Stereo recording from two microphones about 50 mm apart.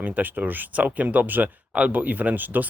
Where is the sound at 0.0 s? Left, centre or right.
Right.